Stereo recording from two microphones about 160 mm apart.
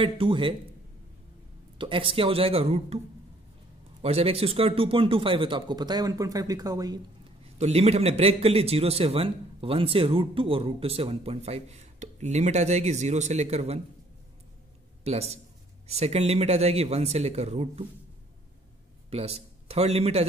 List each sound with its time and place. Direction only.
0.0 s a man's voice: 30° right (ahead or behind)
1.8 s a man's voice: 35° right (ahead or behind)
4.0 s a man's voice: 40° right (ahead or behind); by 7.0 s 25° right (ahead or behind)
7.4 s a man's voice: 40° right (ahead or behind)
15.0 s a man's voice: 40° right (ahead or behind)
19.0 s a man's voice: 40° right (ahead or behind)